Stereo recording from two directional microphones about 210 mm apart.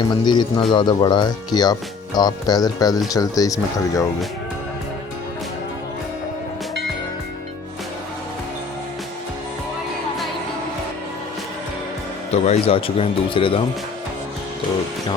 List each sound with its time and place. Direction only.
0.1 s speech: 20° left (ahead or behind)
12.3 s speech: 30° left (ahead or behind)